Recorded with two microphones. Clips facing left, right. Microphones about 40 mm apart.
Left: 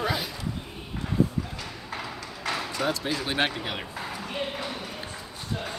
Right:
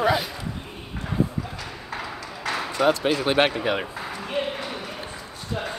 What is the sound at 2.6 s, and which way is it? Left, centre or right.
Basketball bounce, right.